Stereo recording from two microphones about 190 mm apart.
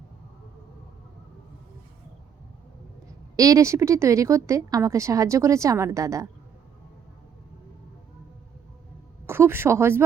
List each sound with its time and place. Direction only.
3.3 s a woman's voice: 20° right (ahead or behind)
9.2 s speech: 15° right (ahead or behind)